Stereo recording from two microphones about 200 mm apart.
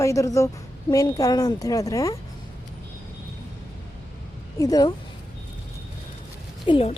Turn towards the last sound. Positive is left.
turn(degrees=25)  # may be behind; listen again after turning